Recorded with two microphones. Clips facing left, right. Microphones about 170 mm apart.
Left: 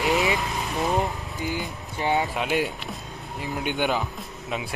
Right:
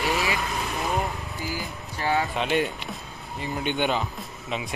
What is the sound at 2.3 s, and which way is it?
Speech, 5° left (ahead or behind).